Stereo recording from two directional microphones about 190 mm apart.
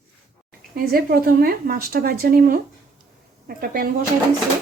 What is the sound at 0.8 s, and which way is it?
A woman's voice, 50° right (ahead or behind).